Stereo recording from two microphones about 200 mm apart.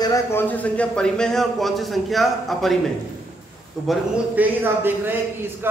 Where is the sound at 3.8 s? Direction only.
Centre (ahead or behind).